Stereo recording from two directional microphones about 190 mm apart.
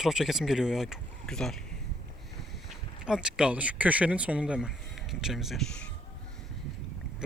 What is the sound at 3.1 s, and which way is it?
Speech, 5° right (ahead or behind).